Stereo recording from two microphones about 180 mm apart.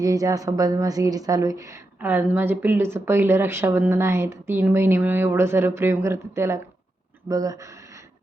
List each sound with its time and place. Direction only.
0.0 s a woman's voice: 20° right (ahead or behind)